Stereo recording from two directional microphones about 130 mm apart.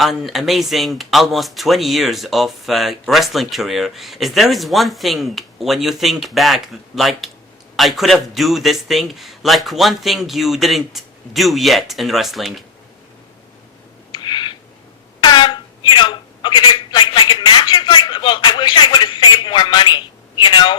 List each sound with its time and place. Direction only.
0.0 s speech: centre (ahead or behind)
14.1 s a sound: 35° left (ahead or behind)
15.2 s speech: 35° left (ahead or behind)